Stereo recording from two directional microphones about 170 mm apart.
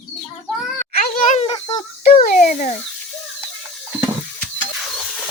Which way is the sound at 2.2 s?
55° left (ahead or behind).